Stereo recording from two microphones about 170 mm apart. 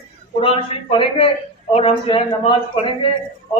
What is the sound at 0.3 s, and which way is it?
A man's voice, 30° left (ahead or behind).